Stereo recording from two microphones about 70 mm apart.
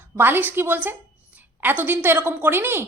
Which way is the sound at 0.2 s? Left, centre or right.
Right.